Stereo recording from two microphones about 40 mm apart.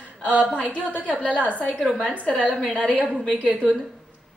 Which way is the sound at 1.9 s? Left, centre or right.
Centre.